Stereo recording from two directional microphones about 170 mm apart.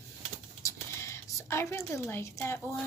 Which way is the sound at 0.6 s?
15° left (ahead or behind).